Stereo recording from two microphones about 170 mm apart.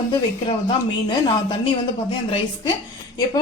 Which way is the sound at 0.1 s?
25° left (ahead or behind).